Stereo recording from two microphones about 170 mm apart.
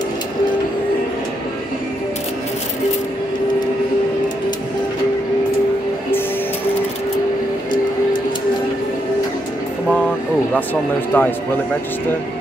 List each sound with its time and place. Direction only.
10.5 s speech: 10° left (ahead or behind)